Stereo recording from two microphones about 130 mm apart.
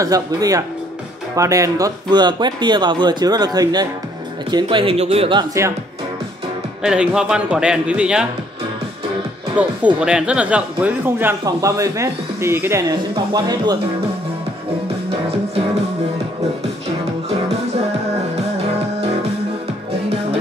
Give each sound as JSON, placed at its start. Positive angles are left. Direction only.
{"t": 0.0, "sound": "speech", "side_deg": -30}
{"t": 6.8, "sound": "speech", "side_deg": -5}
{"t": 9.6, "sound": "speech", "side_deg": -10}
{"t": 12.9, "sound": "speech", "side_deg": -30}
{"t": 15.0, "sound": "music", "side_deg": -50}